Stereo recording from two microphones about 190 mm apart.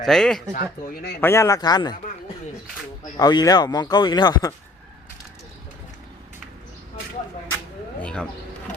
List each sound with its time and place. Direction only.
0.0 s speech: centre (ahead or behind)
0.5 s speech: 50° left (ahead or behind)
1.2 s speech: 15° left (ahead or behind)
3.2 s speech: 20° left (ahead or behind)
8.0 s a sound: 5° left (ahead or behind)